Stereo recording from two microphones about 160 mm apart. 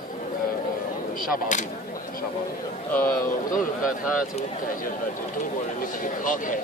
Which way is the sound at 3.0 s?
60° left (ahead or behind).